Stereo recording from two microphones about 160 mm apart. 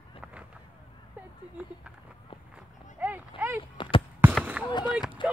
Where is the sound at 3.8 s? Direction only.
30° left (ahead or behind).